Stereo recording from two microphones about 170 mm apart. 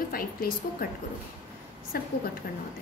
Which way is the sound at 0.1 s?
60° left (ahead or behind).